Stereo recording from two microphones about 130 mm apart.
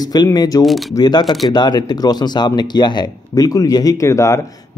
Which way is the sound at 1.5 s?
35° left (ahead or behind).